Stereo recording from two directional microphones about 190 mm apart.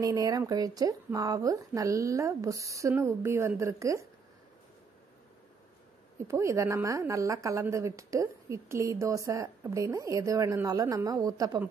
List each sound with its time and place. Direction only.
0.0 s a woman's voice: 20° right (ahead or behind)
6.2 s a woman's voice: 15° right (ahead or behind)